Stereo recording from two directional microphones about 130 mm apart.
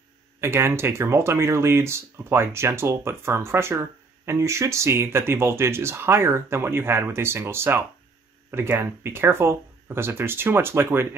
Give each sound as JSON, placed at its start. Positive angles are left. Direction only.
{"t": 0.4, "sound": "speech", "side_deg": -20}